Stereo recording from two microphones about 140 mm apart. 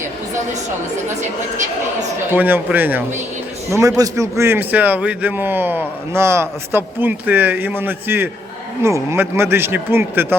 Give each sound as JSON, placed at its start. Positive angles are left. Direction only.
{"t": 2.3, "sound": "a man's voice", "side_deg": -15}